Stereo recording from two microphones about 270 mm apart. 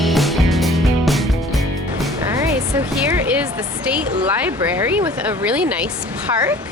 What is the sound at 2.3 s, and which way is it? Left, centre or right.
Music, centre.